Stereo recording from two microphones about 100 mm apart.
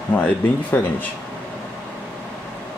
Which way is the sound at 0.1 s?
20° left (ahead or behind).